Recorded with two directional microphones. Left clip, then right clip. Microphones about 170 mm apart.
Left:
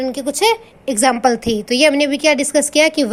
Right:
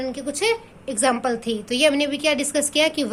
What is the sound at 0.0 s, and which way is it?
A woman's voice, 30° left (ahead or behind).